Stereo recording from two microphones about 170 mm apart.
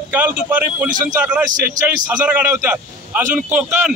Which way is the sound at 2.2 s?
10° right (ahead or behind).